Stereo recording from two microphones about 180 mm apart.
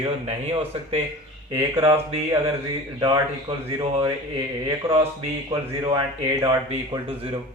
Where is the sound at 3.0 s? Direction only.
30° right (ahead or behind).